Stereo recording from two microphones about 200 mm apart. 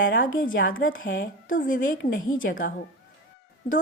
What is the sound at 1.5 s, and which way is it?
Speech, 40° left (ahead or behind).